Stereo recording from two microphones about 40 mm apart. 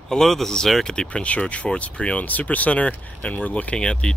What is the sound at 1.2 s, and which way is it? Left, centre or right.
Speech, left.